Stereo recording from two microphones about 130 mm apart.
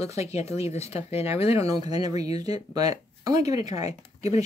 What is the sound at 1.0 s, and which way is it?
Speech, 50° left (ahead or behind).